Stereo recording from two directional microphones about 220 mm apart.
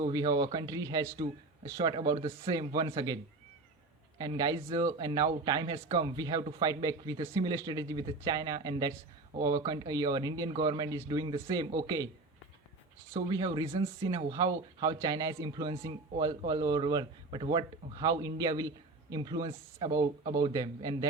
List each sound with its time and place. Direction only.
0.1 s speech: 15° right (ahead or behind)
4.2 s speech: 15° right (ahead or behind)
13.1 s speech: 20° right (ahead or behind)